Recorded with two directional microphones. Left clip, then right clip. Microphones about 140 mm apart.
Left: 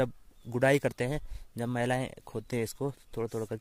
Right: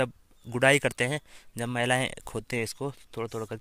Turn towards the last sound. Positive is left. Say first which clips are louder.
# even
turn(degrees=20)  # may be behind; listen again after turning